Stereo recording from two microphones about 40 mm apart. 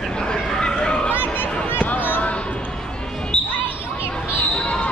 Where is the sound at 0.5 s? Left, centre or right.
Left.